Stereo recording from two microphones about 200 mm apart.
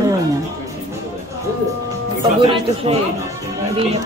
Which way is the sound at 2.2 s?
25° right (ahead or behind).